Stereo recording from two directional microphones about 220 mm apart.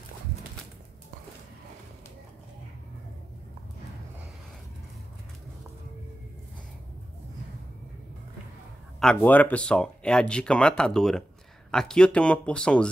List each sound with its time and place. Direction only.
9.0 s speech: 5° left (ahead or behind)